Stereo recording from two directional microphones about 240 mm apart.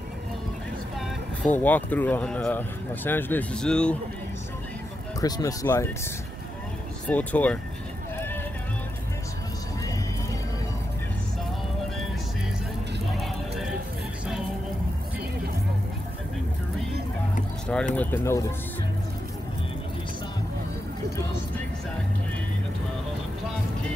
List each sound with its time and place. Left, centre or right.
1.4 s speech: centre
5.2 s speech: centre
7.1 s speech: centre
17.6 s speech: centre